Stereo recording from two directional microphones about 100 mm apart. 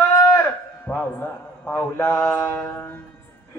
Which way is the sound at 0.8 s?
20° left (ahead or behind).